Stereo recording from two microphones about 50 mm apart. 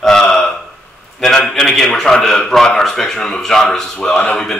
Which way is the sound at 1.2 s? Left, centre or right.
Centre.